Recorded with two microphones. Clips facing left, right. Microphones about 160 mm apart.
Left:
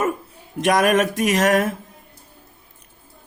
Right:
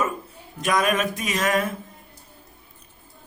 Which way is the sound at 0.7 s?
75° left (ahead or behind).